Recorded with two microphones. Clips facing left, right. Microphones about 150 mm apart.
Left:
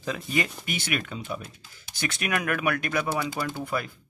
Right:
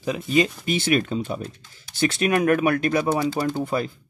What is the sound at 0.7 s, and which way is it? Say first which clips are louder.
Speech: right 9 dB; 30° right (ahead or behind).